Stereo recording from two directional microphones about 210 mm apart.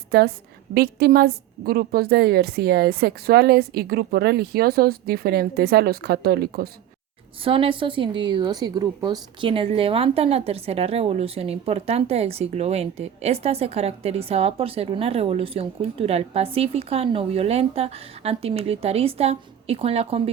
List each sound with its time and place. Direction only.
0.1 s a woman's voice: 45° right (ahead or behind)
7.4 s a woman's voice: 25° right (ahead or behind)